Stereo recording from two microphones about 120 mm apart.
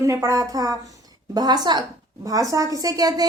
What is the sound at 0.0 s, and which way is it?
A woman's voice, 25° right (ahead or behind).